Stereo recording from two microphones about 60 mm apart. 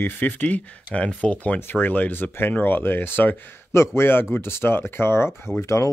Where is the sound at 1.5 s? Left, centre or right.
Left.